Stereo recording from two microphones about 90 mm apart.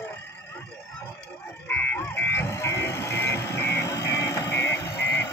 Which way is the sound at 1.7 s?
15° left (ahead or behind).